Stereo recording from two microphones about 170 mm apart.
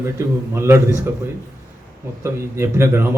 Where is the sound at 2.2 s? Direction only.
15° right (ahead or behind).